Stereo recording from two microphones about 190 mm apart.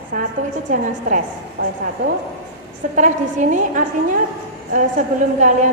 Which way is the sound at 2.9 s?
40° right (ahead or behind).